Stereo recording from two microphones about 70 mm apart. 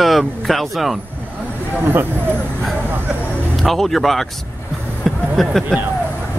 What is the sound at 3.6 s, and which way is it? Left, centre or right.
Speech, centre.